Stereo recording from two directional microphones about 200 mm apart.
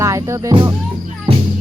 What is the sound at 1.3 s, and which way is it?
Music, 25° right (ahead or behind).